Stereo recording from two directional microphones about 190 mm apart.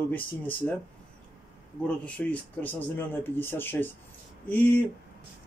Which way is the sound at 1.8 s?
5° left (ahead or behind).